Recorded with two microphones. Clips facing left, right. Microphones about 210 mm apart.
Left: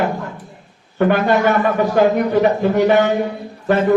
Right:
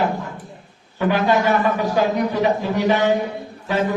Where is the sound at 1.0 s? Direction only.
55° left (ahead or behind).